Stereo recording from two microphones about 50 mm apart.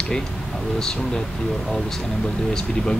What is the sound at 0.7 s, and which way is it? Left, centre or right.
Speech, centre.